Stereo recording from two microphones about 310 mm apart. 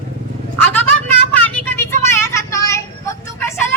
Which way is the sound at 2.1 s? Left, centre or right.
Centre.